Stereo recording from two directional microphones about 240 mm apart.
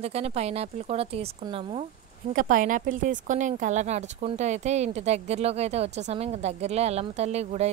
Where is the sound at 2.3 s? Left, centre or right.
Right.